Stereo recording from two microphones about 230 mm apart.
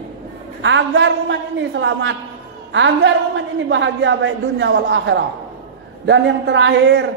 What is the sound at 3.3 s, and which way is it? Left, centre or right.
A man's voice, right.